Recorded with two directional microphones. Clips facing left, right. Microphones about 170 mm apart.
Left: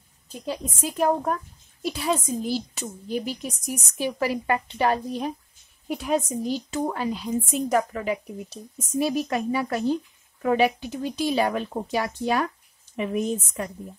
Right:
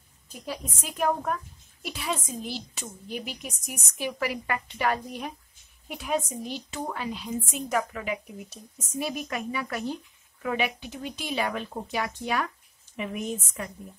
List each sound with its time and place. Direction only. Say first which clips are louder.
0.5 s a woman's voice: left 6 dB; 30° left (ahead or behind)